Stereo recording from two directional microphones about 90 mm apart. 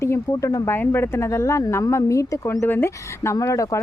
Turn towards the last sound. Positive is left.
turn(degrees=40)  # may be behind; listen again after turning